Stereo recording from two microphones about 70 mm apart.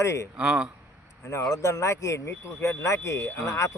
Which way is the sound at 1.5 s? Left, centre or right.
Left.